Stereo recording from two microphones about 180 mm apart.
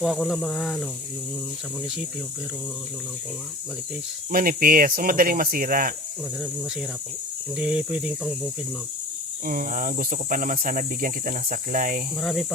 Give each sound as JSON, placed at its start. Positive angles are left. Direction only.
{"t": 0.0, "sound": "speech", "side_deg": 0}
{"t": 4.3, "sound": "speech", "side_deg": -50}
{"t": 7.5, "sound": "speech", "side_deg": -5}
{"t": 9.5, "sound": "speech", "side_deg": -50}
{"t": 12.2, "sound": "speech", "side_deg": 0}